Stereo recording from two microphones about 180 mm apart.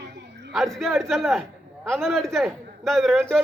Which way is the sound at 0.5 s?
Centre (ahead or behind).